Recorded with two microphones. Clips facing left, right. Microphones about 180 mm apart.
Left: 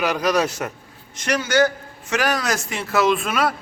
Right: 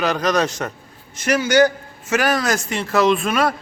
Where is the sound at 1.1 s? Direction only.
5° right (ahead or behind).